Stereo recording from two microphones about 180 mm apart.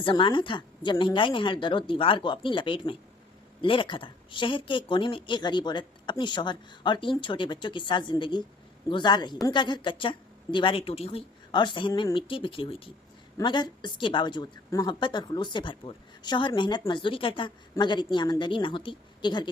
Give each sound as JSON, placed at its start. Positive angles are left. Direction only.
{"t": 0.0, "sound": "a woman's voice", "side_deg": 25}